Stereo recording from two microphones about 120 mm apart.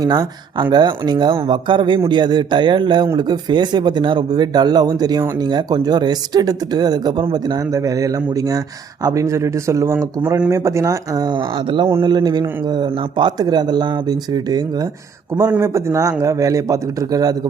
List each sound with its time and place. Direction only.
0.0 s a man's voice: 35° right (ahead or behind)
15.4 s a man's voice: 20° right (ahead or behind)